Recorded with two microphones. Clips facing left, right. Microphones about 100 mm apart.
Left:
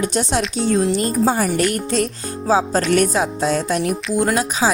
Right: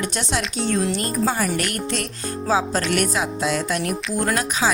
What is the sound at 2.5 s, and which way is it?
Speech, 35° left (ahead or behind).